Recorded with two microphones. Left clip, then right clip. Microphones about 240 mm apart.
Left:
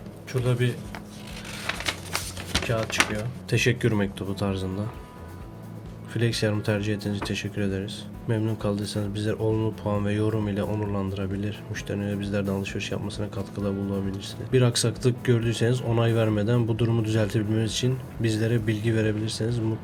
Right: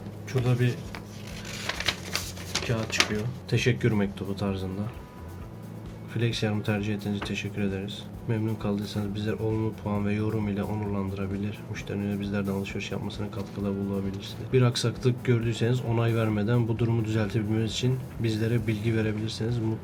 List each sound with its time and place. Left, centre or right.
0.3 s speech: left
2.6 s speech: centre
6.1 s speech: left